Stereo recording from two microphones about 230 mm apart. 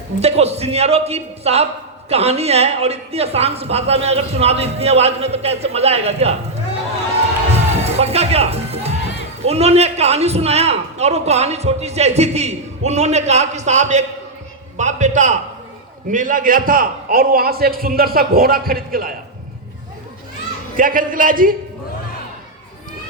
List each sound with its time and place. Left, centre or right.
0.2 s speech: right
7.9 s a man's voice: right
20.7 s a man's voice: right